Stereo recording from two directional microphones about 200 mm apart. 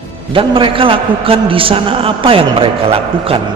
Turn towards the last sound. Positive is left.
turn(degrees=-30)  # may be behind; listen again after turning